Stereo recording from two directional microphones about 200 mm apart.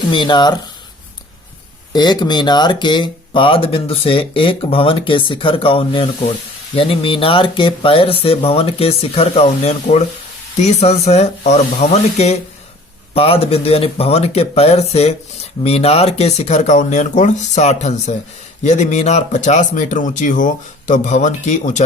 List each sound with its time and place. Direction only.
0.1 s speech: 25° left (ahead or behind)
1.9 s speech: 20° left (ahead or behind); by 21.8 s 35° left (ahead or behind)